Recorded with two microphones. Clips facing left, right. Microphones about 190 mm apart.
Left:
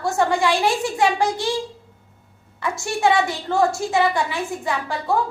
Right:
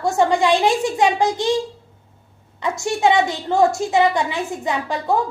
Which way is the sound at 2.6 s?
20° right (ahead or behind).